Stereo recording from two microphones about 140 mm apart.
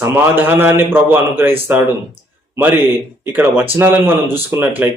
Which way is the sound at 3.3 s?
15° right (ahead or behind).